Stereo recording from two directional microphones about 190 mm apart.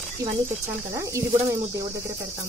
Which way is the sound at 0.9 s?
15° right (ahead or behind).